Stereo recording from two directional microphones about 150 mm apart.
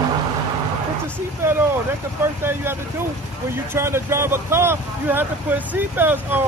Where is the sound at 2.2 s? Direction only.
15° right (ahead or behind).